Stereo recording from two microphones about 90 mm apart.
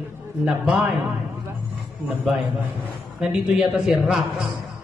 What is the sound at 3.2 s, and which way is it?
A man's voice, 5° right (ahead or behind).